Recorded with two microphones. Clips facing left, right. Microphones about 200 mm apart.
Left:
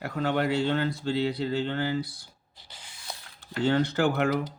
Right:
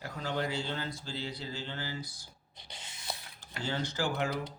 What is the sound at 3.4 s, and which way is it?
Speech, 60° left (ahead or behind).